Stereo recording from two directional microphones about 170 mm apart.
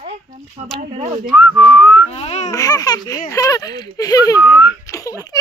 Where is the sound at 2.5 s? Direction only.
20° left (ahead or behind).